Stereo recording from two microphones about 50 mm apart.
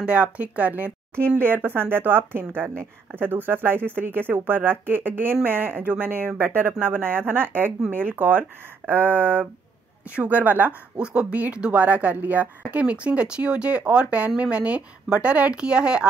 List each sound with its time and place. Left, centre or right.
0.0 s speech: right
1.4 s speech: right
10.0 s speech: right